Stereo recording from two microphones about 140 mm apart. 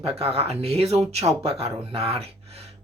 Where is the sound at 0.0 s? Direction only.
45° right (ahead or behind).